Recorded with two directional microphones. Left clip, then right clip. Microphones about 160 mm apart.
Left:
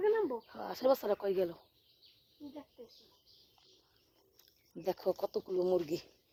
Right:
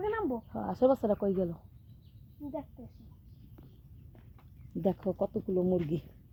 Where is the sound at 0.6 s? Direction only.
35° left (ahead or behind).